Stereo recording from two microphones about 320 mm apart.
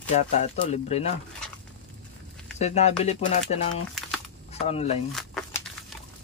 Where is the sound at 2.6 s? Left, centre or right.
Left.